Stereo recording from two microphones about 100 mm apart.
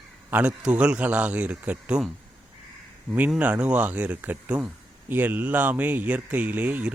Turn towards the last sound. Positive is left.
turn(degrees=-15)  # may be behind; listen again after turning